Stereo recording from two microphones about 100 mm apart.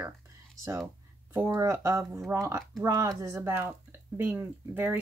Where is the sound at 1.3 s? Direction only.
30° right (ahead or behind).